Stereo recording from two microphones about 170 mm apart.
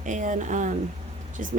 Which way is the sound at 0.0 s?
50° right (ahead or behind).